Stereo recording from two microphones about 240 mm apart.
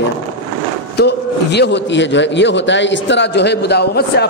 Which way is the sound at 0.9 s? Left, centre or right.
Left.